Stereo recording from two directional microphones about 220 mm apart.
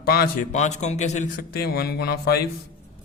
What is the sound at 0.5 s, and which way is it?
A man's voice, 30° left (ahead or behind).